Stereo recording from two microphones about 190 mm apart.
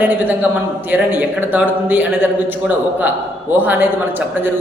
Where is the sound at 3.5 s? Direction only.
10° right (ahead or behind).